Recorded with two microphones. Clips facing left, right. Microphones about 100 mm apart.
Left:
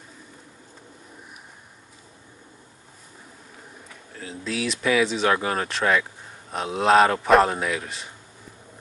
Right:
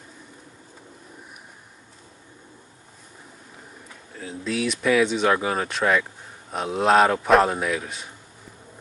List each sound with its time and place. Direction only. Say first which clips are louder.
4.1 s speech: right 2 dB; centre (ahead or behind)